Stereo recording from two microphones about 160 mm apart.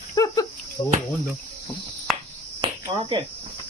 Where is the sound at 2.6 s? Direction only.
30° right (ahead or behind).